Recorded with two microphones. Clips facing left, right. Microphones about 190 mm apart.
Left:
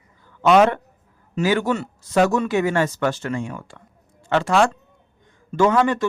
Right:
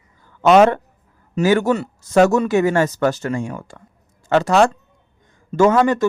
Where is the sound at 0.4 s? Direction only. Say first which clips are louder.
Right 3 dB; 45° right (ahead or behind).